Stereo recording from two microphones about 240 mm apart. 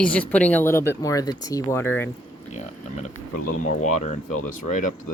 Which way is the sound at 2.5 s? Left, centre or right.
Left.